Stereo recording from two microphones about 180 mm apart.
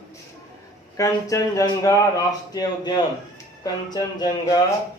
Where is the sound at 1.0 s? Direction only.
20° left (ahead or behind).